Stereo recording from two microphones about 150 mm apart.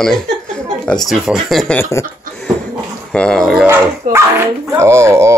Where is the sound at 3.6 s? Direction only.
15° right (ahead or behind).